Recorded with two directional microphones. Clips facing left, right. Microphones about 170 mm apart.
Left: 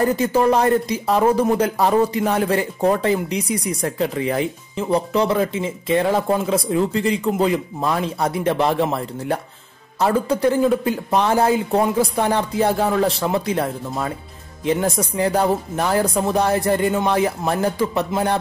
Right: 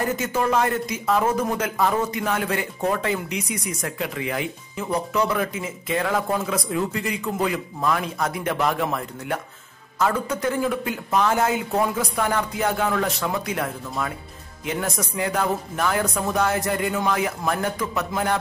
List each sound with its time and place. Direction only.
0.0 s speech: 35° left (ahead or behind)